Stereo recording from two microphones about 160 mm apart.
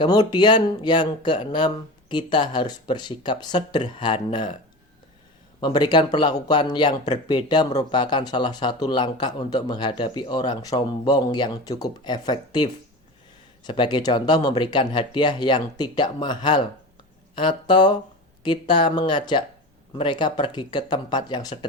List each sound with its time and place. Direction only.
0.0 s speech: 25° left (ahead or behind)
5.5 s speech: 25° left (ahead or behind)